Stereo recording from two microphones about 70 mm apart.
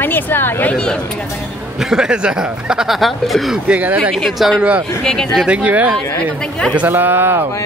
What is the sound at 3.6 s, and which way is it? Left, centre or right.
Speech, centre.